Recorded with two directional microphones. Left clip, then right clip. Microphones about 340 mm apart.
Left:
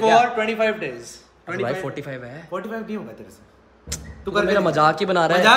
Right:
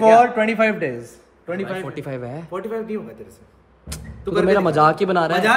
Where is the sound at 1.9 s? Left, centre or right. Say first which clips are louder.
Right 3 dB; centre.